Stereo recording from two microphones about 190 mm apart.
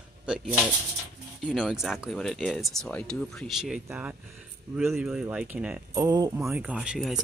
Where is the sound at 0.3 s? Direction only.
5° right (ahead or behind).